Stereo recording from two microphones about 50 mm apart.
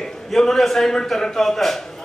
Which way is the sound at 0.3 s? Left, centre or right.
Centre.